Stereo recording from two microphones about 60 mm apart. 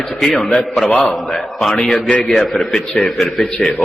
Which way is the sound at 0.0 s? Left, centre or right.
Centre.